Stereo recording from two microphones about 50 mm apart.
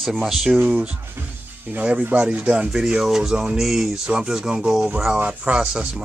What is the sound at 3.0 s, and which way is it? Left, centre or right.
Speech, centre.